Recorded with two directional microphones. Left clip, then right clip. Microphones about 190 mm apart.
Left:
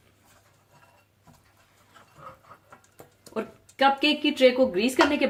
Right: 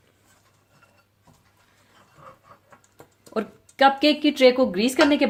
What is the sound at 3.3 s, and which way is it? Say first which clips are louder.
Speech: right 4 dB; 50° right (ahead or behind).